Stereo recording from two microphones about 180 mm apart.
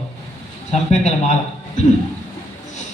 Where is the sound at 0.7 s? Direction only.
40° left (ahead or behind).